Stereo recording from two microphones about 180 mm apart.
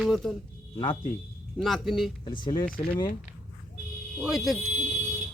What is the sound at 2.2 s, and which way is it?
Speech, 25° left (ahead or behind).